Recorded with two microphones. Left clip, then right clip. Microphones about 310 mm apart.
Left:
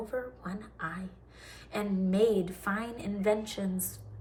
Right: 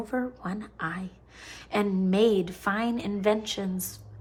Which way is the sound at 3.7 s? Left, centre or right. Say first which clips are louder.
Right 2 dB; centre.